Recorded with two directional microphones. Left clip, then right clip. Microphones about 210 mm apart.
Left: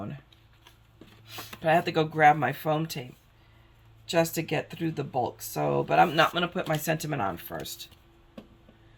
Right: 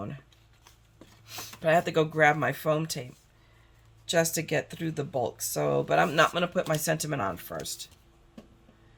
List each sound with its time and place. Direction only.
1.6 s speech: 30° right (ahead or behind)
4.1 s speech: 25° right (ahead or behind)